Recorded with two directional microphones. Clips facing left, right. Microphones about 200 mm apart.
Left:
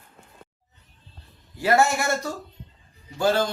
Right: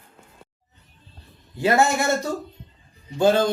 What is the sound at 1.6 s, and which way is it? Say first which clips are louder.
Speech: right 1 dB; 25° right (ahead or behind).